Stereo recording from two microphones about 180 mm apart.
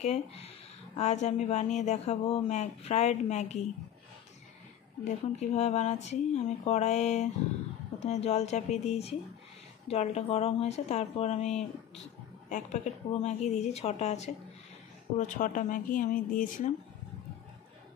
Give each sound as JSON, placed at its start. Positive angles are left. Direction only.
{"t": 0.0, "sound": "speech", "side_deg": 35}
{"t": 5.0, "sound": "speech", "side_deg": 40}